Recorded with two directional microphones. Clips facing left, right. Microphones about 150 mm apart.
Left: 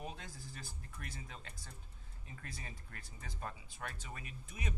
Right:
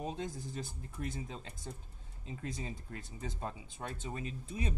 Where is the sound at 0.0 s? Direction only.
25° right (ahead or behind).